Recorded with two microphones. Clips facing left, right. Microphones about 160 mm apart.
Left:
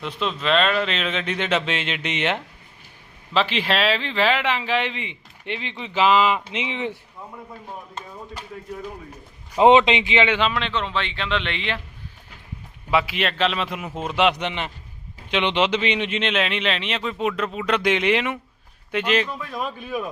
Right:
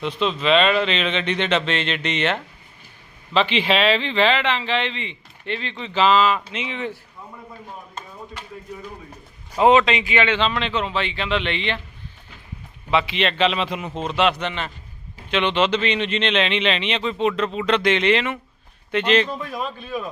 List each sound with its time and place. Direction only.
0.0 s a man's voice: centre (ahead or behind); by 6.9 s 20° left (ahead or behind)
9.6 s a man's voice: 25° left (ahead or behind); by 10.7 s 5° left (ahead or behind)
10.7 s speech: 5° right (ahead or behind)
12.9 s a man's voice: 5° left (ahead or behind)